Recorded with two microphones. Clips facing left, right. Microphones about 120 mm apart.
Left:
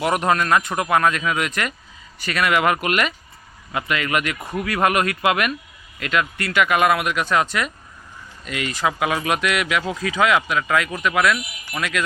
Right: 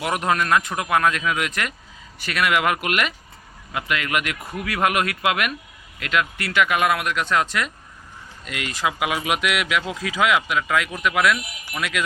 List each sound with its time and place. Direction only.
0.0 s speech: centre (ahead or behind)